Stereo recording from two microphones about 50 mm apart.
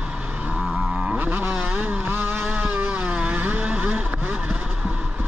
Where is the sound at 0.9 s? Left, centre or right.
Centre.